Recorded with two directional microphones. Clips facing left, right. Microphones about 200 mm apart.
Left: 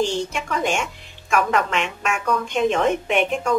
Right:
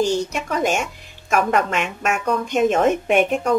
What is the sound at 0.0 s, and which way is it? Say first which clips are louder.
A woman's voice: right 3 dB; 40° right (ahead or behind).